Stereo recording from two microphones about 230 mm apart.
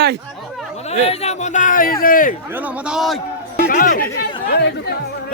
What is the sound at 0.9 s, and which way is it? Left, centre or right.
A man's voice, left.